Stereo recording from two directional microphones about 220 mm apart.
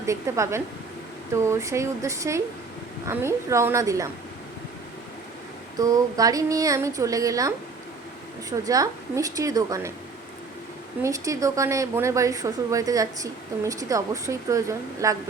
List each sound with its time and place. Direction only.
0.0 s a woman's voice: 15° right (ahead or behind)
5.7 s a woman's voice: 15° right (ahead or behind)
11.0 s a woman's voice: 15° right (ahead or behind)